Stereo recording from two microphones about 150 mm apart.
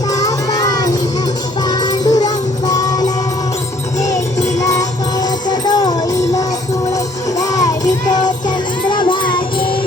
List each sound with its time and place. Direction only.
0.1 s music: 25° left (ahead or behind)
4.6 s music: 25° left (ahead or behind)
6.9 s music: 25° left (ahead or behind)